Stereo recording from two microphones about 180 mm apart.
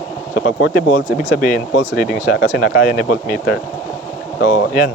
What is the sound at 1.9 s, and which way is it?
Speech, centre (ahead or behind).